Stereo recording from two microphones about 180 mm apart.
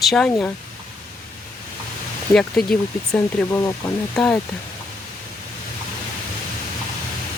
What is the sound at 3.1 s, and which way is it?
Speech, 15° left (ahead or behind).